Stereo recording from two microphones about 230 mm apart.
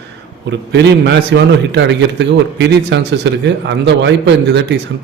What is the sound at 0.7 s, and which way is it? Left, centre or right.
A man's voice, right.